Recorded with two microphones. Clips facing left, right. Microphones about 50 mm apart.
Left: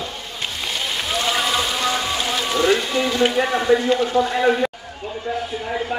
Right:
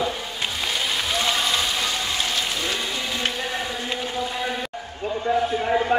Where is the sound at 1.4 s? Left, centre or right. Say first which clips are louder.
Left 3 dB; centre.